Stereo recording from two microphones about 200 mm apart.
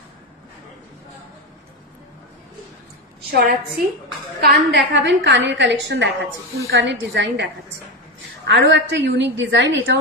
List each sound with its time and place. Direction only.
3.3 s a woman's voice: 50° right (ahead or behind)
8.5 s a woman's voice: 60° right (ahead or behind)